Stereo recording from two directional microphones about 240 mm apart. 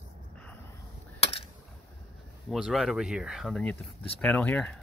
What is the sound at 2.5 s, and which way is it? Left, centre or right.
Speech, centre.